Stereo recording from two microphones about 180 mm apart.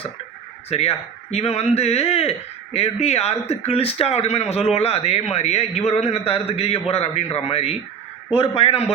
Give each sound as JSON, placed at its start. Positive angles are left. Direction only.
{"t": 0.7, "sound": "speech", "side_deg": 35}